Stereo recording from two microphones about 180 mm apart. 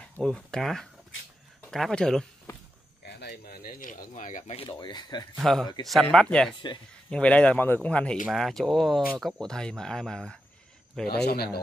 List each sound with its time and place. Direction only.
0.0 s speech: 5° left (ahead or behind)
3.0 s a sound: 65° left (ahead or behind); by 4.6 s 45° left (ahead or behind)
4.6 s speech: 25° left (ahead or behind)
5.4 s a man's voice: centre (ahead or behind)
11.1 s a man's voice: 60° left (ahead or behind)